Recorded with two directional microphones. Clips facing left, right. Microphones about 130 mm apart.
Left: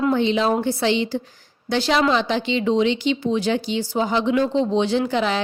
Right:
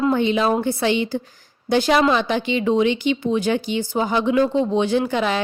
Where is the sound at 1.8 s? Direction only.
50° right (ahead or behind).